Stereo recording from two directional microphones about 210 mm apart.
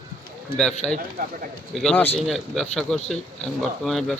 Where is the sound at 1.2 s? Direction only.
40° right (ahead or behind).